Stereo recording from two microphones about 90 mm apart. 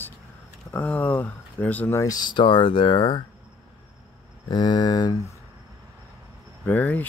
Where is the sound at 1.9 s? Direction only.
35° left (ahead or behind).